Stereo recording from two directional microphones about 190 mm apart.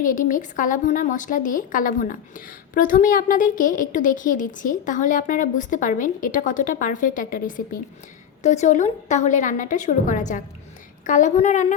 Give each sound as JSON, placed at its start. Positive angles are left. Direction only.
{"t": 0.0, "sound": "a woman's voice", "side_deg": 45}